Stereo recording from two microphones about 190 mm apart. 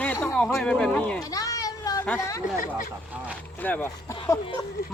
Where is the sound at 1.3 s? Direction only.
20° left (ahead or behind).